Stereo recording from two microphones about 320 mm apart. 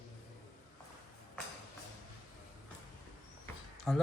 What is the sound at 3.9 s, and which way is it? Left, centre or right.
Speech, centre.